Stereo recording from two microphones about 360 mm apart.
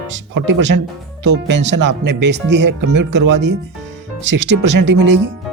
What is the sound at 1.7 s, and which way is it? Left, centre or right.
Speech, right.